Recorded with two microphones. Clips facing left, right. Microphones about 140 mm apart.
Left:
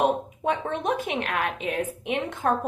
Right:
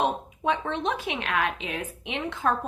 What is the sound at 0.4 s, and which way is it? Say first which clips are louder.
A woman's voice: left 1 dB; 50° left (ahead or behind).